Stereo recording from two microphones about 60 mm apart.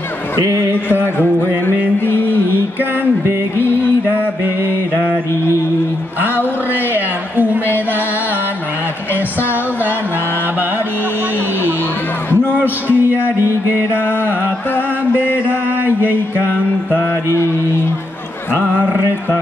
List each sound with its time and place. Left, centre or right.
1.1 s speech: left
2.0 s music: left
9.1 s a sound: left
12.6 s speech: left
15.1 s chant: left
15.8 s mantra: right